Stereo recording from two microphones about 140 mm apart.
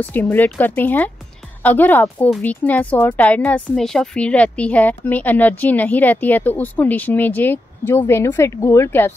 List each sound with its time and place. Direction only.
0.0 s a woman's voice: 15° left (ahead or behind)